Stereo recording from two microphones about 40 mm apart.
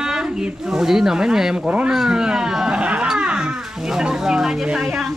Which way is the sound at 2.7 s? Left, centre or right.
Right.